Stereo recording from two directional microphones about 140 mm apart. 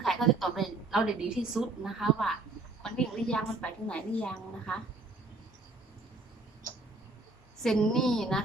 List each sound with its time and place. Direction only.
0.0 s a woman's voice: centre (ahead or behind)
7.6 s a woman's voice: 5° left (ahead or behind)